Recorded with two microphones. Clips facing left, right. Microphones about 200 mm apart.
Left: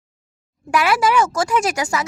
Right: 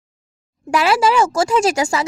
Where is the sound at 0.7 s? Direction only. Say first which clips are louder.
Right 2 dB; 25° right (ahead or behind).